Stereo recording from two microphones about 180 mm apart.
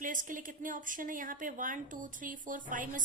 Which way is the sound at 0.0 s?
45° right (ahead or behind).